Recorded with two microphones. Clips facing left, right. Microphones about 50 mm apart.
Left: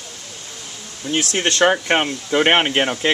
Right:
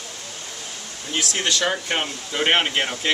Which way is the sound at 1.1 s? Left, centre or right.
Left.